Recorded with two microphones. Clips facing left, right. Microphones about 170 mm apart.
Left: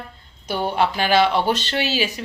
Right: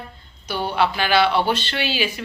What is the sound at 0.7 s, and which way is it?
Speech, 45° left (ahead or behind).